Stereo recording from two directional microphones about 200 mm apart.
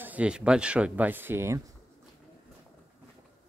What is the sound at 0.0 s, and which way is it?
Speech, 5° right (ahead or behind).